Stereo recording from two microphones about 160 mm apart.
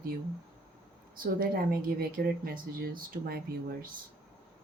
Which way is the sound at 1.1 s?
70° right (ahead or behind).